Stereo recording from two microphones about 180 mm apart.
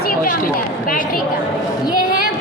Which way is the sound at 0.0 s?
55° left (ahead or behind).